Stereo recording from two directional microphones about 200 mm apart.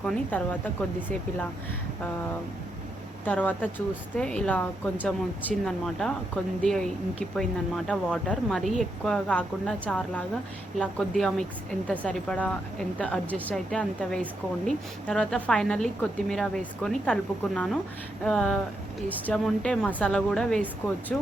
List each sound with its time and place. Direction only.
0.0 s speech: 10° left (ahead or behind)
3.2 s a woman's voice: 10° left (ahead or behind)